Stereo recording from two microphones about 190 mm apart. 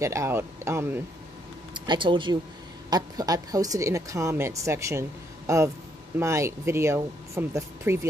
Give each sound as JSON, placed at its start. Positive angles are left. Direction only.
{"t": 0.0, "sound": "a woman's voice", "side_deg": -15}
{"t": 1.7, "sound": "a woman's voice", "side_deg": -25}